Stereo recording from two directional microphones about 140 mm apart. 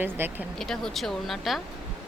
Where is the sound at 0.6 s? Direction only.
5° left (ahead or behind).